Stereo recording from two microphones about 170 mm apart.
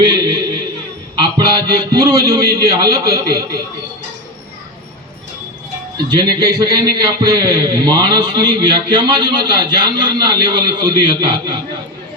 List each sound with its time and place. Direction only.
0.0 s a sound: 25° right (ahead or behind)
1.1 s a man's voice: 25° right (ahead or behind)
6.1 s a man's voice: 25° right (ahead or behind)